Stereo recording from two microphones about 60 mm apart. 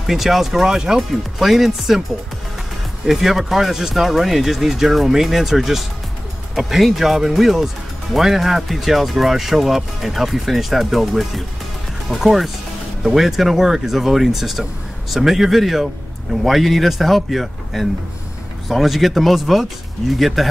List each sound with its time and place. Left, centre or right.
0.0 s speech: centre
3.1 s speech: centre